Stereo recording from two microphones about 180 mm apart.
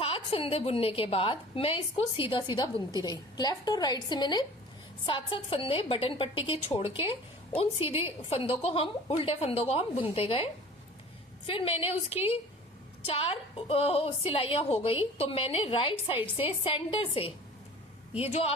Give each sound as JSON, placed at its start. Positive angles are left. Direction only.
{"t": 0.0, "sound": "a woman's voice", "side_deg": 30}